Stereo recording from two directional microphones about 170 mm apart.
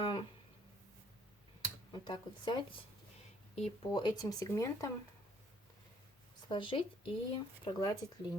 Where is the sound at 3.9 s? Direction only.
25° left (ahead or behind).